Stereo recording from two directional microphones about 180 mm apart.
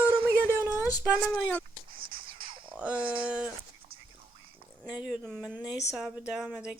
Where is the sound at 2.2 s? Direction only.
30° right (ahead or behind).